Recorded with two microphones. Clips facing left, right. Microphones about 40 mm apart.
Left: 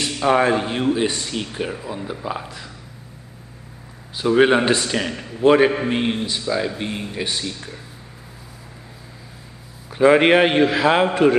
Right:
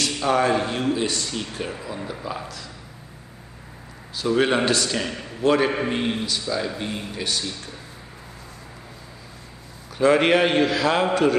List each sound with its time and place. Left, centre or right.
0.0 s speech: left
4.2 s speech: left
9.9 s speech: centre